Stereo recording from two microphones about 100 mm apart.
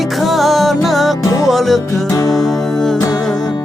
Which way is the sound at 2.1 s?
35° left (ahead or behind).